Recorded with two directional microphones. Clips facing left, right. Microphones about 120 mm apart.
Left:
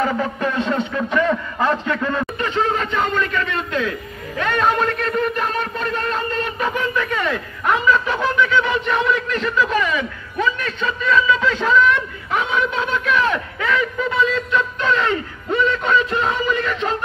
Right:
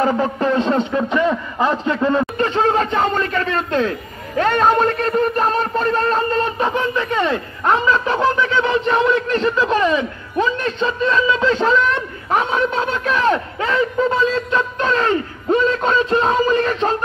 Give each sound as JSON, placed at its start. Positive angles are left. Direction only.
{"t": 0.0, "sound": "speech", "side_deg": -30}
{"t": 2.3, "sound": "a man's voice", "side_deg": -40}
{"t": 4.4, "sound": "a sound", "side_deg": -35}